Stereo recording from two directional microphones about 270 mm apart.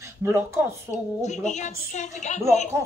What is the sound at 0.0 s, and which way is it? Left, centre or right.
Speech, centre.